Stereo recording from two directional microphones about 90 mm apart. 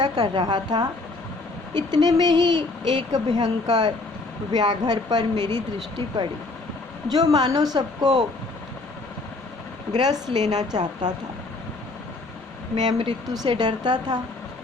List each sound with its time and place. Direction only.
0.0 s speech: 50° right (ahead or behind)
7.1 s speech: 45° right (ahead or behind)
10.0 s speech: 50° right (ahead or behind)
12.7 s speech: 55° right (ahead or behind)